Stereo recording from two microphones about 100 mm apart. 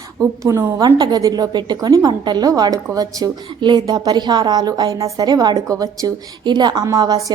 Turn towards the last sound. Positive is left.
turn(degrees=-40)  # may be behind; listen again after turning